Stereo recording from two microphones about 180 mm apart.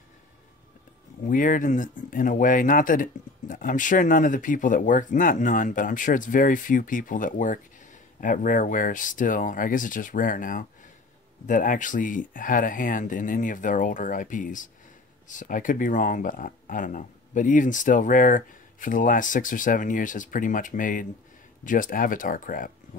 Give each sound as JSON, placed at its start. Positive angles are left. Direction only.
{"t": 1.2, "sound": "speech", "side_deg": 45}